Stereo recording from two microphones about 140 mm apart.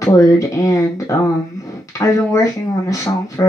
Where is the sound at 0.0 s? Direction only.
25° left (ahead or behind).